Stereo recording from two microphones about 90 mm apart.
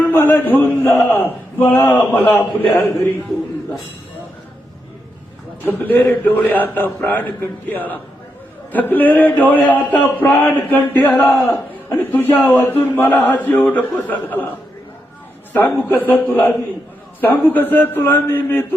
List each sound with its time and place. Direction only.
0.0 s a man's voice: 20° left (ahead or behind)
5.7 s a man's voice: 20° left (ahead or behind)
15.5 s a man's voice: 20° left (ahead or behind)